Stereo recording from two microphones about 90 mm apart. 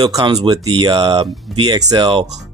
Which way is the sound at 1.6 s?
50° right (ahead or behind).